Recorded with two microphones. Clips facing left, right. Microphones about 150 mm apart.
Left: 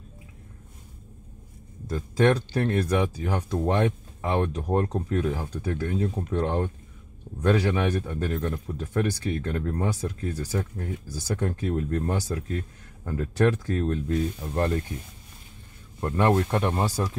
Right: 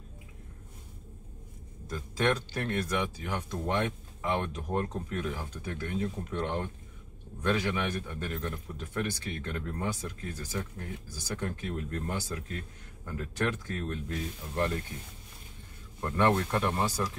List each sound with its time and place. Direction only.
1.9 s speech: 35° left (ahead or behind)
16.0 s speech: 30° left (ahead or behind)